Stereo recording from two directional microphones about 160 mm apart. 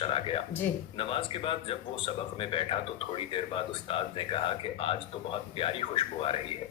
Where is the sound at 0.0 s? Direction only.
35° left (ahead or behind).